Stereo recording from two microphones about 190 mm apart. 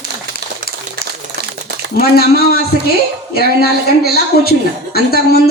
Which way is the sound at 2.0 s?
55° left (ahead or behind).